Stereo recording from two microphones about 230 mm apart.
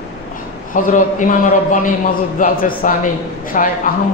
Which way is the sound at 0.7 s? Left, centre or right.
Left.